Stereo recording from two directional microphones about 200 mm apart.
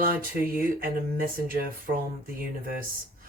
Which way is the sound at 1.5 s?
45° right (ahead or behind).